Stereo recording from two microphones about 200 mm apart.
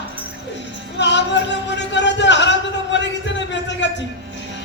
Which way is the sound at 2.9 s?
65° left (ahead or behind).